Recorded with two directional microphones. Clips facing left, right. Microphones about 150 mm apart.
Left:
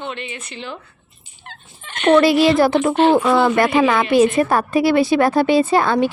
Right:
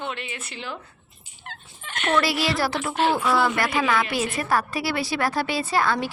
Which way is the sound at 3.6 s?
55° left (ahead or behind).